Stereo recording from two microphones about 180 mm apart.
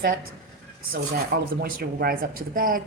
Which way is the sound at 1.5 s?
55° right (ahead or behind).